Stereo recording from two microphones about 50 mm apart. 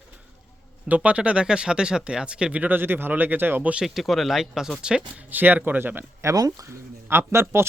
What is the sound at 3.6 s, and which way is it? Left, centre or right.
Speech, right.